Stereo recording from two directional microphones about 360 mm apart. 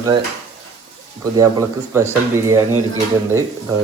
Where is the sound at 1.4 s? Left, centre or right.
Centre.